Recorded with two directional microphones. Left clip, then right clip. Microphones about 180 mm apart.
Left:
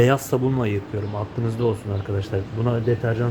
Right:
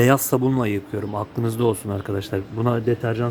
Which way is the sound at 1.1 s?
60° right (ahead or behind).